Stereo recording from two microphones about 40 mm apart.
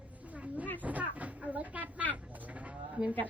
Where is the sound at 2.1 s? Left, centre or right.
Right.